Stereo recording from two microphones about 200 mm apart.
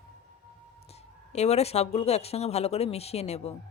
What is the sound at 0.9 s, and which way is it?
Speech, 35° left (ahead or behind).